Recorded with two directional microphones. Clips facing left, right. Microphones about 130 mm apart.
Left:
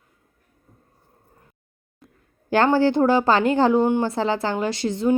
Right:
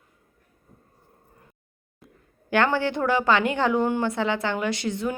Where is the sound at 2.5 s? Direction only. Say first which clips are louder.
Left 5 dB; 35° left (ahead or behind).